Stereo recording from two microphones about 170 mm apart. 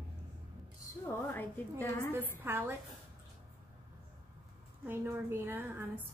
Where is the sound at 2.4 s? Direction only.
10° right (ahead or behind).